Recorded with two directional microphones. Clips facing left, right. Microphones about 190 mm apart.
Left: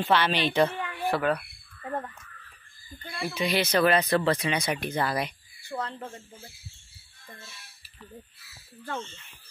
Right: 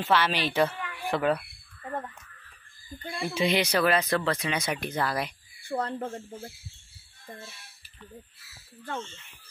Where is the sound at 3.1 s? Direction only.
20° right (ahead or behind).